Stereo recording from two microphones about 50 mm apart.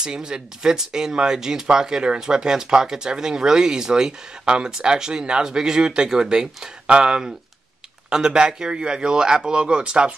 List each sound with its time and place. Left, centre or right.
0.0 s speech: centre